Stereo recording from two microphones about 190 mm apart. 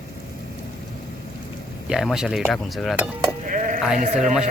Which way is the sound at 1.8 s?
5° right (ahead or behind).